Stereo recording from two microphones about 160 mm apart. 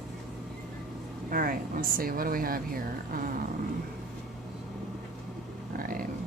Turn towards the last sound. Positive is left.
turn(degrees=-65)  # may be behind; listen again after turning